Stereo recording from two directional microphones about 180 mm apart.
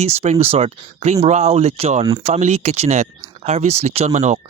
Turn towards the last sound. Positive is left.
turn(degrees=-40)  # may be behind; listen again after turning